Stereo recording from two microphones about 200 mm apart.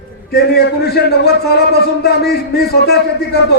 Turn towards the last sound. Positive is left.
turn(degrees=55)  # may be behind; listen again after turning